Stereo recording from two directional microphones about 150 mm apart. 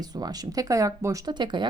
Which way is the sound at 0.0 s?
25° right (ahead or behind).